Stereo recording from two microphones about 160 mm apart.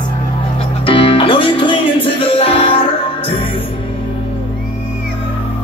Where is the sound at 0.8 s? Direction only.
35° left (ahead or behind).